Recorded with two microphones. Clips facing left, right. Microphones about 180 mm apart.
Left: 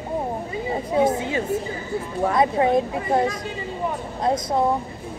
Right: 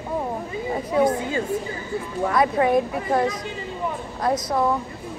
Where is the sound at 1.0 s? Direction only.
25° left (ahead or behind).